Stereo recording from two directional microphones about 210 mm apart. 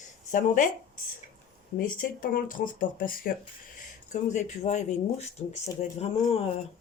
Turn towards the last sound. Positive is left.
turn(degrees=30)  # may be behind; listen again after turning